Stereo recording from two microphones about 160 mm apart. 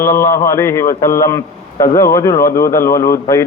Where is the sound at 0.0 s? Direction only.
15° left (ahead or behind).